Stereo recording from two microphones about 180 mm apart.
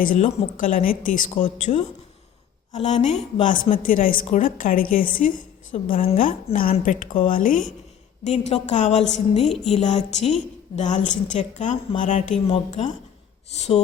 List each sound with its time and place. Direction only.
0.0 s a woman's voice: 45° left (ahead or behind); by 3.8 s 30° left (ahead or behind)
3.8 s a woman's voice: 50° left (ahead or behind)
5.7 s a woman's voice: 40° left (ahead or behind)
8.2 s a woman's voice: 35° left (ahead or behind)